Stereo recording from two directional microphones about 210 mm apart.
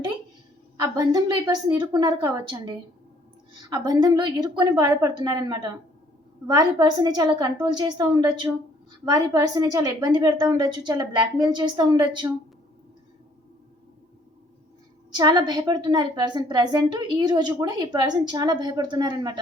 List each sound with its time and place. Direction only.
0.8 s a woman's voice: 15° right (ahead or behind)
15.1 s a woman's voice: 20° right (ahead or behind)